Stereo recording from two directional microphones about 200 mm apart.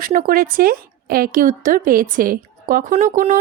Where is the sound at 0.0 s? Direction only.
45° right (ahead or behind).